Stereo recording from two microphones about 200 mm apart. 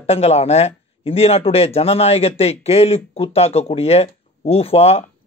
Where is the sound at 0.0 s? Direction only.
30° left (ahead or behind).